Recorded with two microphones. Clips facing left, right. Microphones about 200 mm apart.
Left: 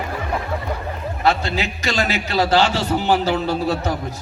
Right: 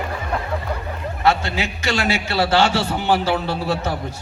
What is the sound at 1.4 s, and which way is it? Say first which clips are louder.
A man's voice: left 1 dB; 35° left (ahead or behind).